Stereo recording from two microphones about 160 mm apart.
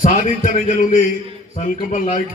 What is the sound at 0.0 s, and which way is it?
Music, 60° left (ahead or behind).